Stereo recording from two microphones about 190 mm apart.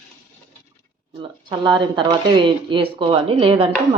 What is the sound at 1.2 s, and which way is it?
Speech, 25° right (ahead or behind).